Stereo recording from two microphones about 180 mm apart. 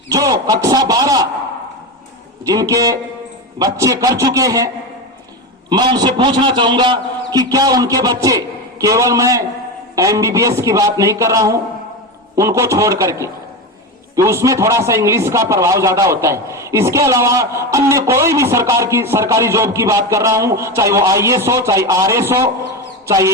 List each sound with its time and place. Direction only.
0.1 s a man's voice: 20° right (ahead or behind)
2.4 s a man's voice: 20° right (ahead or behind)